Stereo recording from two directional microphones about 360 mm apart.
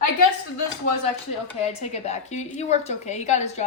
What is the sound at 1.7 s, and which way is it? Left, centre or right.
A woman's voice, centre.